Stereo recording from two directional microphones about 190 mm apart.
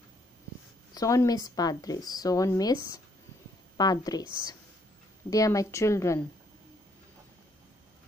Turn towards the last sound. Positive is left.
turn(degrees=15)  # may be behind; listen again after turning